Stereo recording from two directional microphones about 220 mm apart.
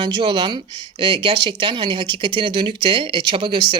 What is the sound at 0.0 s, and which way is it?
Speech, 20° right (ahead or behind).